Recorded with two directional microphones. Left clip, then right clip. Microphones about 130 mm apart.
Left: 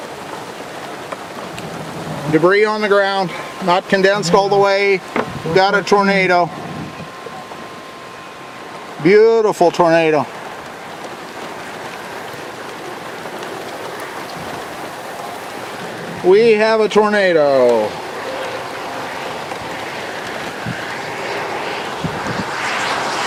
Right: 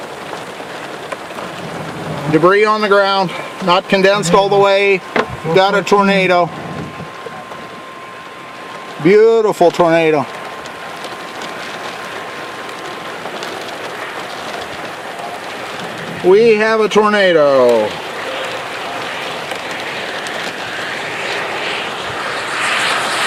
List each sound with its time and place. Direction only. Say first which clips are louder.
2.3 s speech: right 2 dB; 15° right (ahead or behind)
9.0 s speech: right 1 dB; 10° right (ahead or behind)
16.2 s speech: right 1 dB; 10° right (ahead or behind)
21.2 s vehicle: right 2 dB; 20° right (ahead or behind)